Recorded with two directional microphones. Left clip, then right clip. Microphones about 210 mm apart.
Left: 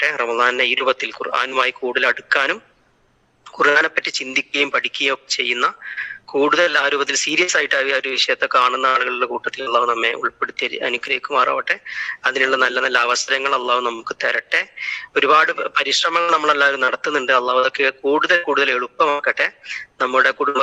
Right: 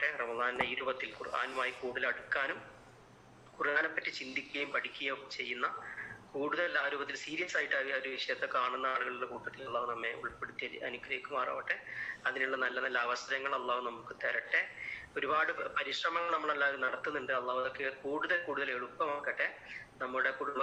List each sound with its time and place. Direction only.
0.0 s a man's voice: 50° left (ahead or behind)
3.6 s a man's voice: 50° left (ahead or behind)